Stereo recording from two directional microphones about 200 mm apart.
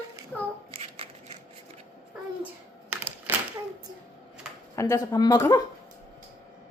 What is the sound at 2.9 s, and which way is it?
Typewriter, 10° right (ahead or behind).